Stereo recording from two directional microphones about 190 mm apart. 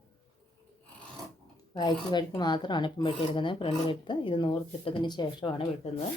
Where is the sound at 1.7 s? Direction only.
20° left (ahead or behind).